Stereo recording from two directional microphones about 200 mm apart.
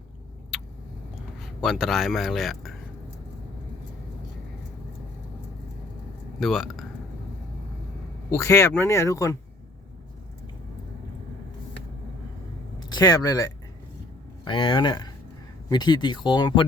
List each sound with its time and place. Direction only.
0.5 s vehicle: 5° right (ahead or behind)
1.4 s speech: centre (ahead or behind)
6.4 s speech: centre (ahead or behind)
8.3 s speech: 15° left (ahead or behind)
12.9 s speech: 20° left (ahead or behind)